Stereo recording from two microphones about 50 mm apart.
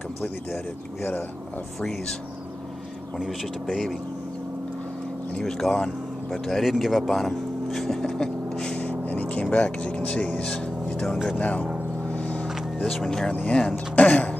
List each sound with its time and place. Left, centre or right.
5.4 s speech: centre
8.7 s vehicle: left
11.3 s speech: left
12.1 s vehicle: left
12.8 s speech: centre
13.9 s throat clearing: left